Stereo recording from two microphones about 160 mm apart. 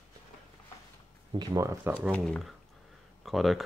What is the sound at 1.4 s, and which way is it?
Speech, 25° right (ahead or behind).